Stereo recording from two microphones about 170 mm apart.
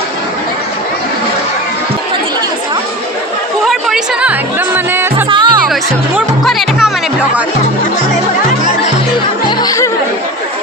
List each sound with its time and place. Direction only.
3.7 s music: centre (ahead or behind)
5.3 s music: 30° right (ahead or behind)
6.1 s music: centre (ahead or behind)
9.5 s music: 25° left (ahead or behind)